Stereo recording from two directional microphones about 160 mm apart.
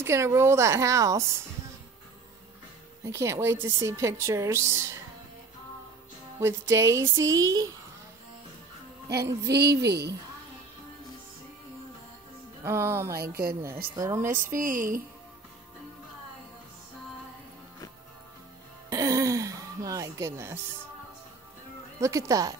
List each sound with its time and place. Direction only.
0.0 s a woman's voice: 15° right (ahead or behind)
3.2 s a woman's voice: 15° right (ahead or behind)
6.7 s a woman's voice: 20° right (ahead or behind)
9.2 s a woman's voice: 20° right (ahead or behind)
9.5 s speech: 90° right
12.6 s a woman's voice: 15° right (ahead or behind)
13.2 s a woman's voice: 75° right (ahead or behind)
13.8 s a woman's voice: 20° right (ahead or behind)
14.3 s a woman's voice: 55° right (ahead or behind)
18.9 s music: 20° right (ahead or behind)
22.0 s a woman's voice: 20° right (ahead or behind)